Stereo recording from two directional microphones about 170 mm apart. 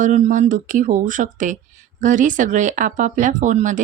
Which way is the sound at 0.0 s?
50° right (ahead or behind).